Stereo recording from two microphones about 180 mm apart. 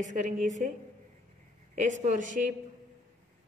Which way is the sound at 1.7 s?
45° right (ahead or behind).